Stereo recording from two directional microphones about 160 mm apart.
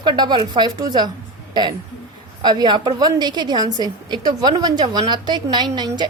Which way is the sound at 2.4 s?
30° right (ahead or behind).